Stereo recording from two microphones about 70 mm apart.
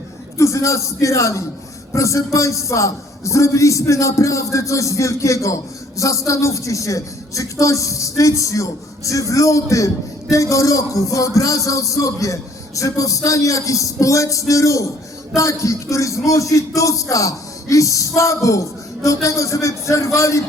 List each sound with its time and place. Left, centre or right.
0.3 s speech: left